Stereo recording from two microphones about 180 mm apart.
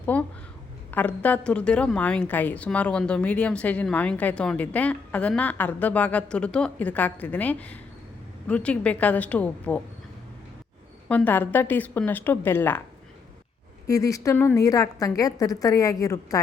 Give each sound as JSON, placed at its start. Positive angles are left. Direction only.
{"t": 0.0, "sound": "a sound", "side_deg": 10}
{"t": 0.9, "sound": "a woman's voice", "side_deg": 10}
{"t": 11.1, "sound": "a woman's voice", "side_deg": 10}
{"t": 13.8, "sound": "a woman's voice", "side_deg": 20}